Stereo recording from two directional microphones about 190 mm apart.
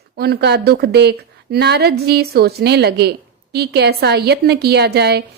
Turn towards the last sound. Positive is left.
turn(degrees=-60)  # may be behind; listen again after turning